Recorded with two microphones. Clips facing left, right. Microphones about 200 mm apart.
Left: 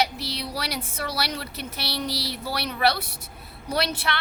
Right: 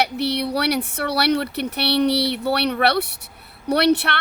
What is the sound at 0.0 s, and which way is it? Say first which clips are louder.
A woman's voice: right 6 dB; 65° right (ahead or behind).